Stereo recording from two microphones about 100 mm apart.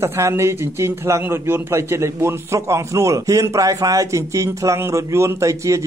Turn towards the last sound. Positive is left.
turn(degrees=-30)  # may be behind; listen again after turning